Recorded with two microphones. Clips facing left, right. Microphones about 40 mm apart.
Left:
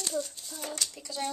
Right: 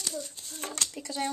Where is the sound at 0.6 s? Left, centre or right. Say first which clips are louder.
Right 1 dB; right.